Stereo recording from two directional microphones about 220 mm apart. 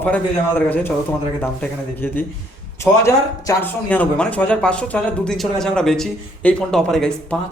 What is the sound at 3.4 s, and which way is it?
Speech, 10° left (ahead or behind).